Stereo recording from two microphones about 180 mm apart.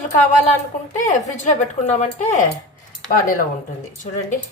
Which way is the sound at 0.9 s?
40° left (ahead or behind).